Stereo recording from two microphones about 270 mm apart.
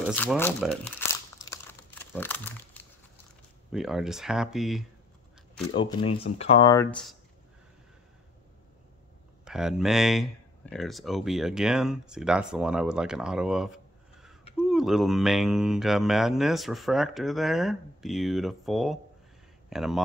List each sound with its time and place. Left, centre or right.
0.0 s speech: centre
1.4 s crumpling: centre
3.7 s speech: centre
5.8 s speech: centre
9.4 s speech: centre